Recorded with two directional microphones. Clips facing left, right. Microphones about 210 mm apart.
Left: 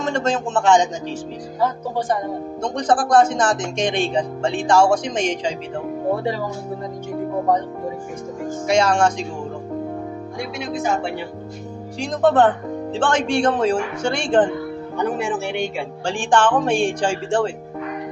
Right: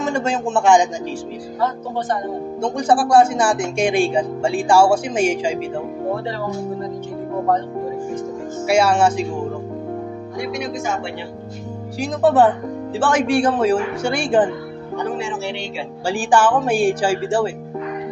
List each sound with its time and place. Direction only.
0.0 s speech: 10° right (ahead or behind)
2.6 s speech: 10° right (ahead or behind)
8.6 s speech: 10° right (ahead or behind)
12.0 s speech: 5° right (ahead or behind)
15.1 s speech: 50° left (ahead or behind)
16.1 s speech: 5° right (ahead or behind)